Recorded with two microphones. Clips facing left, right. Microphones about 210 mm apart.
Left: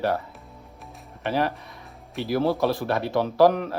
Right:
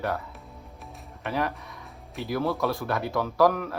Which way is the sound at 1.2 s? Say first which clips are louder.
Left 4 dB; 30° left (ahead or behind).